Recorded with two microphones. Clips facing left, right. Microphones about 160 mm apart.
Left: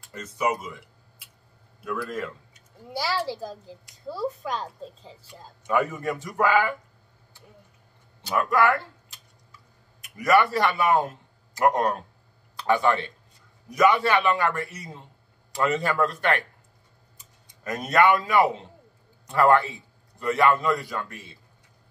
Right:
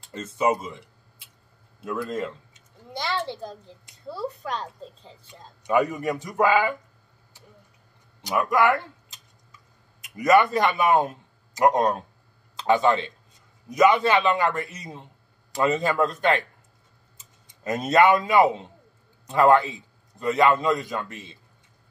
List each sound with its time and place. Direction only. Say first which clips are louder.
0.0 s speech: right 3 dB; 25° right (ahead or behind)
2.9 s a woman's voice: left 1 dB; 5° left (ahead or behind)
5.6 s a man's voice: right 3 dB; 15° right (ahead or behind)
8.2 s tick-tock: right 1 dB; 15° right (ahead or behind)
10.0 s a man's voice: right 2 dB; 20° right (ahead or behind)